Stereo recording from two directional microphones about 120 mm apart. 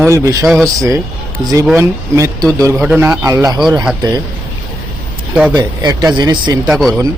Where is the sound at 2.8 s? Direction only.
5° right (ahead or behind).